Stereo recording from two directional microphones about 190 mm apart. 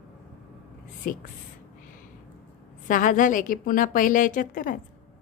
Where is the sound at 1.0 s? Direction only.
45° left (ahead or behind).